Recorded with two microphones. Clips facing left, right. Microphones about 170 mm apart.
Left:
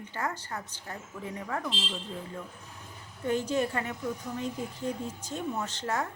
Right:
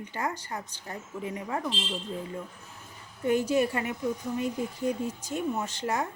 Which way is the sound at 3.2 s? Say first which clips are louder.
Right 4 dB; 10° right (ahead or behind).